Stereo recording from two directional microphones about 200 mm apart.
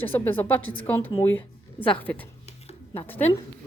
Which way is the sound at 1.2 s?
10° left (ahead or behind).